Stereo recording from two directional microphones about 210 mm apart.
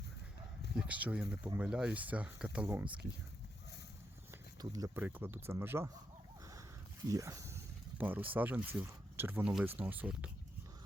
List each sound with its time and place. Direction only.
0.8 s speech: 5° right (ahead or behind)
4.6 s speech: 15° right (ahead or behind)
6.4 s a sound: 15° right (ahead or behind)
7.1 s speech: 15° right (ahead or behind)